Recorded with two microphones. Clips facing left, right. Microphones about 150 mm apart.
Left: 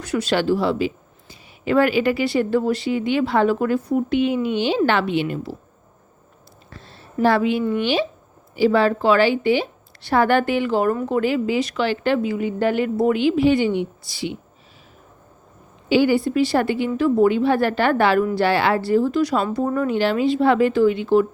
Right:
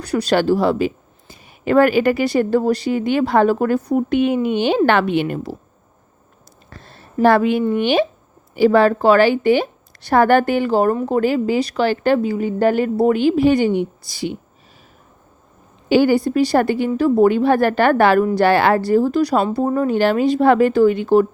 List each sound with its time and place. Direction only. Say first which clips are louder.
0.0 s speech: right 3 dB; 40° right (ahead or behind)
6.7 s a sound: right 1 dB; 50° right (ahead or behind)
7.7 s speech: right 4 dB; 55° right (ahead or behind)
15.9 s speech: right 3 dB; 45° right (ahead or behind)
20.0 s speech: right 3 dB; 50° right (ahead or behind)